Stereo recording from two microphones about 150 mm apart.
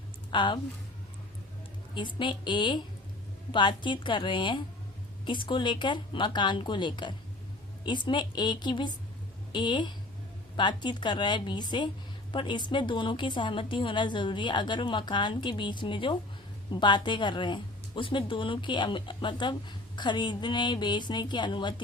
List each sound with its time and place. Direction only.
0.3 s a woman's voice: 30° left (ahead or behind)
2.0 s a woman's voice: 35° left (ahead or behind)